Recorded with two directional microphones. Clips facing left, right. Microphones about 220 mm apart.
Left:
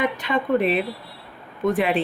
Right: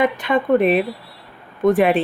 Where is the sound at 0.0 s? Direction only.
50° right (ahead or behind).